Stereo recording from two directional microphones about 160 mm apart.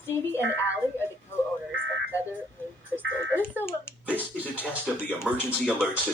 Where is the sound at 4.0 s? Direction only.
10° right (ahead or behind).